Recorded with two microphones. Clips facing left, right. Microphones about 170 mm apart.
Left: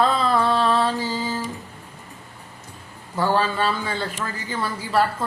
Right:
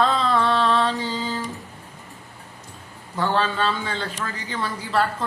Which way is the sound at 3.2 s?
10° left (ahead or behind).